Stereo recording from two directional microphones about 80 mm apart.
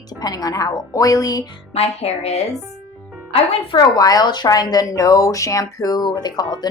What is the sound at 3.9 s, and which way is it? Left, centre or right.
Speech, left.